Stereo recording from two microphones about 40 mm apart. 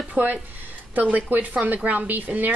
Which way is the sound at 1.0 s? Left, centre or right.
Right.